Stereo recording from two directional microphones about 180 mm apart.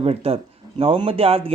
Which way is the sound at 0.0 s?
35° right (ahead or behind).